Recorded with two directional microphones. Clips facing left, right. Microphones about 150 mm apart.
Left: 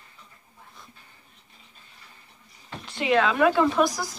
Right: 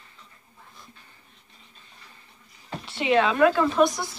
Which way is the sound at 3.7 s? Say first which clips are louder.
Right 2 dB; centre (ahead or behind).